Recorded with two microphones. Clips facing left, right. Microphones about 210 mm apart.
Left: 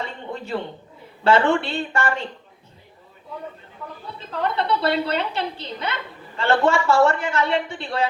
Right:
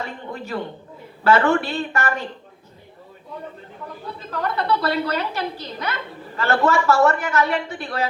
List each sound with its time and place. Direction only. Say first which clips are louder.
1.2 s a woman's voice: right 1 dB; 30° left (ahead or behind)
4.3 s a woman's voice: even; 25° left (ahead or behind)